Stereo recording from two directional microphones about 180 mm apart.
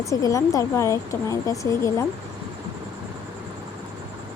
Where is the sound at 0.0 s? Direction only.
15° left (ahead or behind).